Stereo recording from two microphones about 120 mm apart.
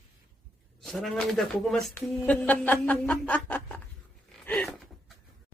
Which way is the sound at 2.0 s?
15° left (ahead or behind).